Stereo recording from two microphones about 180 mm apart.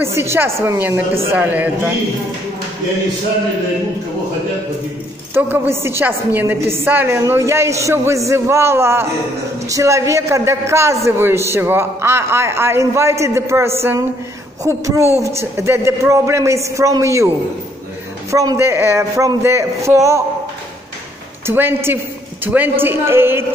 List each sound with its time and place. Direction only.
0.0 s a woman's voice: 15° right (ahead or behind)
5.3 s a woman's voice: 15° right (ahead or behind)
18.3 s a woman's voice: 20° right (ahead or behind)
21.5 s a woman's voice: 10° right (ahead or behind)